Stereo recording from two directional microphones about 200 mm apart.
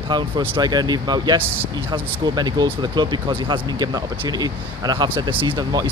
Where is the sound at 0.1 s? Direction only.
20° right (ahead or behind).